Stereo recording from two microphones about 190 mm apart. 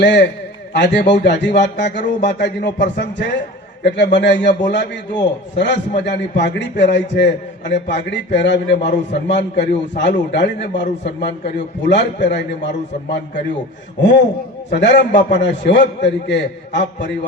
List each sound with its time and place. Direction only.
0.0 s a man's voice: 65° left (ahead or behind)
14.7 s a man's voice: 65° left (ahead or behind)